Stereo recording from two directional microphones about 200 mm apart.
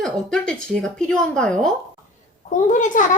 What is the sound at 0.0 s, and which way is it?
Speech, 5° left (ahead or behind).